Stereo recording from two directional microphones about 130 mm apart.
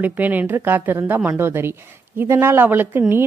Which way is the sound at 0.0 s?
15° right (ahead or behind).